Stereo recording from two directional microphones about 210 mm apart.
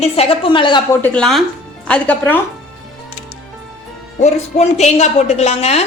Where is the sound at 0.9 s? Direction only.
5° left (ahead or behind).